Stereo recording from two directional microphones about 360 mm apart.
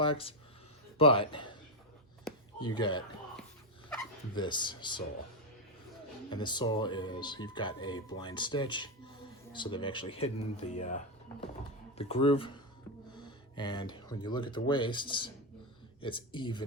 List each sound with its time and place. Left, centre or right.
0.0 s a man's voice: centre
2.6 s speech: centre
6.3 s speech: centre